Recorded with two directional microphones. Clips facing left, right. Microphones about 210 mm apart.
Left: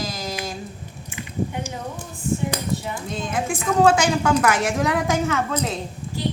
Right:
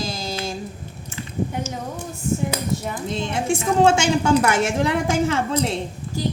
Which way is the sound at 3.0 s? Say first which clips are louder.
Right 4 dB; 30° right (ahead or behind).